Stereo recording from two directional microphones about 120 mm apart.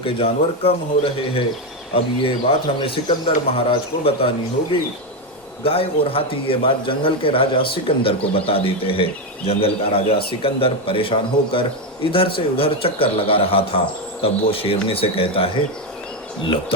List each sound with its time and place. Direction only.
0.0 s speech: 50° left (ahead or behind)
5.6 s speech: 50° left (ahead or behind)